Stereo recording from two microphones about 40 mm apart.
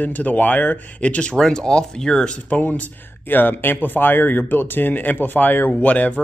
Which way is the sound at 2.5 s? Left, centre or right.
Left.